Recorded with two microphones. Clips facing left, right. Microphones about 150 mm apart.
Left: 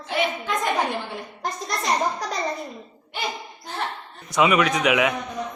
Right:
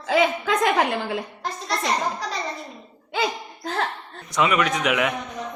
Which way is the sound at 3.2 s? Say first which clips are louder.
Right 5 dB; 90° right.